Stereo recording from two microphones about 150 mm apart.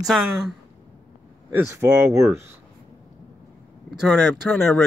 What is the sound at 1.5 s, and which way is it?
Speech, 15° right (ahead or behind).